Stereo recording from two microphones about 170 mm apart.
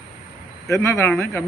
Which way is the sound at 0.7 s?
15° left (ahead or behind).